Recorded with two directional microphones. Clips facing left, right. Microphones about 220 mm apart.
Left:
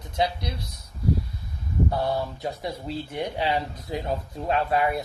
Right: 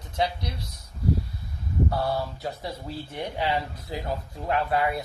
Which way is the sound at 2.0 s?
20° left (ahead or behind).